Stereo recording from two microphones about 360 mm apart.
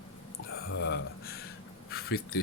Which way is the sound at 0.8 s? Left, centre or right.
Left.